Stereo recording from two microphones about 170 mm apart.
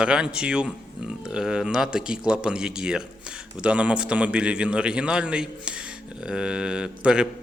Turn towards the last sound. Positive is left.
turn(degrees=-5)  # may be behind; listen again after turning